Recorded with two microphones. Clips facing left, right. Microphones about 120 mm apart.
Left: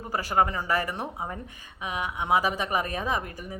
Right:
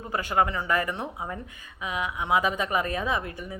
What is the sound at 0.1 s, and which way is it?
A woman's voice, 35° left (ahead or behind).